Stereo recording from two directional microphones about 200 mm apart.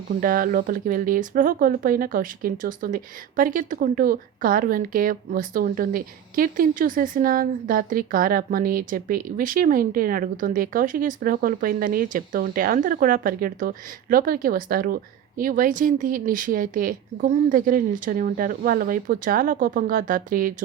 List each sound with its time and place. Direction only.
0.2 s speech: 45° right (ahead or behind)